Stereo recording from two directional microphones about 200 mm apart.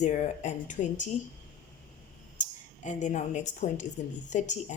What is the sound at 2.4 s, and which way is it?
Speech, 40° left (ahead or behind).